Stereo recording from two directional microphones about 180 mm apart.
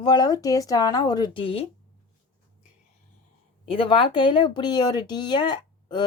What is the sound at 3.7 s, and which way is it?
Speech, 30° left (ahead or behind).